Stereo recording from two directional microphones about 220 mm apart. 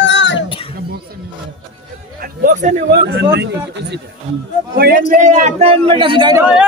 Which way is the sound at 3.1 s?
50° right (ahead or behind).